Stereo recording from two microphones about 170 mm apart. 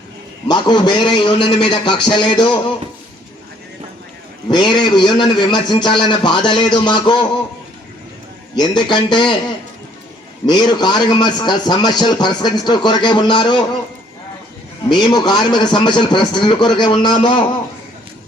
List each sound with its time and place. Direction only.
0.4 s a man's voice: 25° left (ahead or behind)
4.4 s a man's voice: 25° left (ahead or behind)
8.5 s a man's voice: 25° left (ahead or behind)
10.4 s a man's voice: 25° left (ahead or behind)
14.8 s a man's voice: 25° left (ahead or behind)